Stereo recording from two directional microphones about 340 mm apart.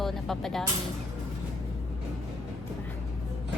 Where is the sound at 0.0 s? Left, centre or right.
Centre.